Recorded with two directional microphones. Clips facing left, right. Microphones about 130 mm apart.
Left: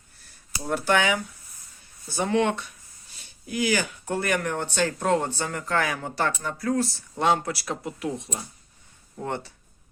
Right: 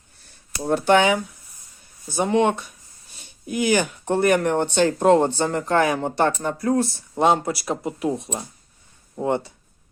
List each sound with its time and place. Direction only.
0.7 s speech: 25° right (ahead or behind)
3.5 s speech: 25° right (ahead or behind)